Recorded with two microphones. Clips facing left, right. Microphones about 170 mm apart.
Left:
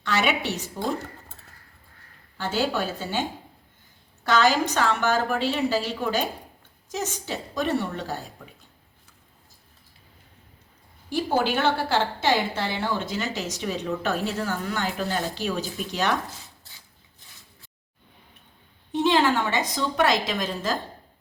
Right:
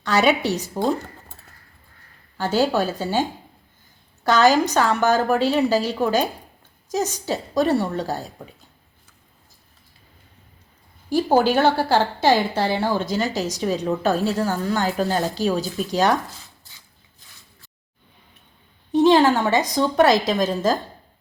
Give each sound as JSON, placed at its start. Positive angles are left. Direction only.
{"t": 0.0, "sound": "a woman's voice", "side_deg": -40}
{"t": 2.4, "sound": "a woman's voice", "side_deg": -40}
{"t": 11.1, "sound": "a woman's voice", "side_deg": -40}
{"t": 18.9, "sound": "a woman's voice", "side_deg": -40}